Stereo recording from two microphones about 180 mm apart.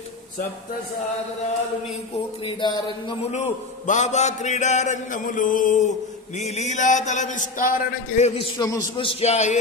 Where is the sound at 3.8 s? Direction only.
40° left (ahead or behind).